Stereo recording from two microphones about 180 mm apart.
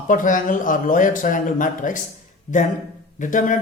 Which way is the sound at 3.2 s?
45° left (ahead or behind).